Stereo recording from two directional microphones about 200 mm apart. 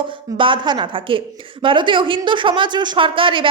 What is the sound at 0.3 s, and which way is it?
Speech, 25° right (ahead or behind).